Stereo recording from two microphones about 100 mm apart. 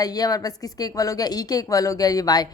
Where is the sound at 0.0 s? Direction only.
40° left (ahead or behind).